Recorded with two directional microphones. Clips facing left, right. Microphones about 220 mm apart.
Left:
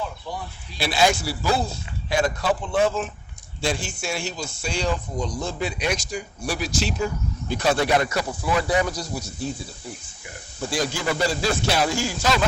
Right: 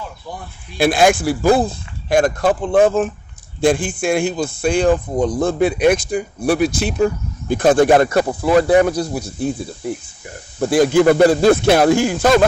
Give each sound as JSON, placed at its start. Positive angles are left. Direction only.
{"t": 0.8, "sound": "speech", "side_deg": -50}